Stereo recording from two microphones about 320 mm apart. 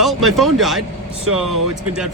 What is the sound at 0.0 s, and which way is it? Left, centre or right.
Speech, centre.